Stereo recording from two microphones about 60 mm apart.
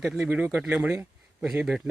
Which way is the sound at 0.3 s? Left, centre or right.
Right.